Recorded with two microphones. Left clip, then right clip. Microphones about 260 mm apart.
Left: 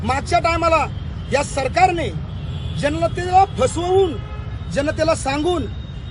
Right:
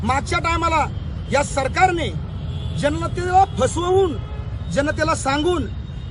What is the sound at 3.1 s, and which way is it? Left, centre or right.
A man's voice, right.